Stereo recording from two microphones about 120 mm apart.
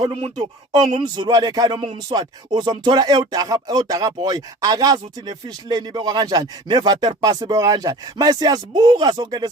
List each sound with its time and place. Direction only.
0.0 s speech: 40° right (ahead or behind)